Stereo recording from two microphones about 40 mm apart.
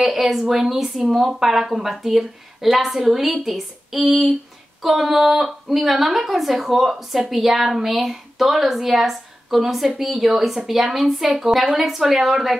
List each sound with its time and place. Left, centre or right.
0.0 s a woman's voice: centre